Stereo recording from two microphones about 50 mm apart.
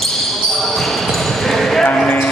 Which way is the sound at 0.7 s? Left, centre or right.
Centre.